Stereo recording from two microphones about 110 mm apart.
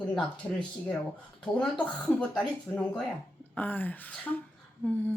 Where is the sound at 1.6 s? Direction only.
10° left (ahead or behind).